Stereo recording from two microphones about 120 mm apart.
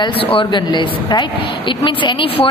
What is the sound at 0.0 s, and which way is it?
A woman's voice, 45° left (ahead or behind).